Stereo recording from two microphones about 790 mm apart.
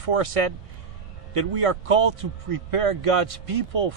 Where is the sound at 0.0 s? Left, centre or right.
Right.